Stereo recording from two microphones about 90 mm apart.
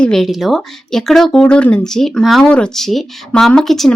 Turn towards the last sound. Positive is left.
turn(degrees=0)  # may be behind; listen again after turning